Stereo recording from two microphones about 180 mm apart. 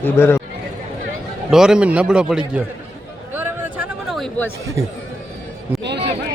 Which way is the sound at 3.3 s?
10° right (ahead or behind).